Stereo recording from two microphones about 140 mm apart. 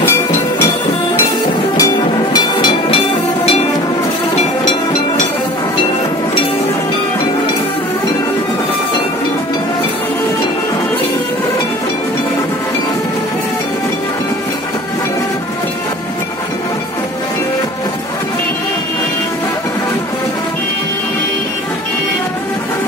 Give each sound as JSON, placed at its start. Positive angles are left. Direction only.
{"t": 1.8, "sound": "music", "side_deg": 25}
{"t": 2.5, "sound": "music", "side_deg": 35}